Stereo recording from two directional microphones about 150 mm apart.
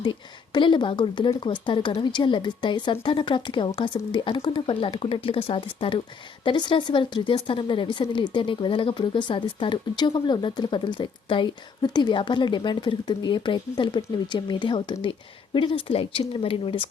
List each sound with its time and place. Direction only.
0.0 s speech: 30° left (ahead or behind)